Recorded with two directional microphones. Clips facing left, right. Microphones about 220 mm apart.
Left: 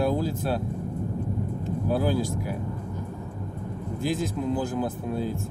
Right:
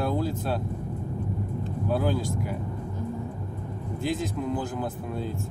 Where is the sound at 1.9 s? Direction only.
10° left (ahead or behind).